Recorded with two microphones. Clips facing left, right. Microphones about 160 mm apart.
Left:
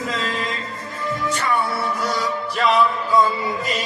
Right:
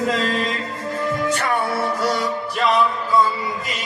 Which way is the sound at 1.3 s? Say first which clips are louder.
Right 1 dB; 50° right (ahead or behind).